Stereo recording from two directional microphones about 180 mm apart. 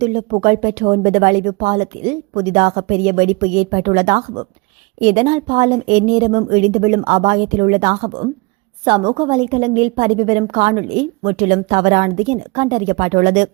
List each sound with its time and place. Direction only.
0.0 s a woman's voice: 35° right (ahead or behind)